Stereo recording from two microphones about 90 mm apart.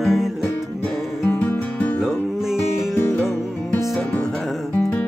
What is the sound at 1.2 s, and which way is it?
Music, 25° left (ahead or behind).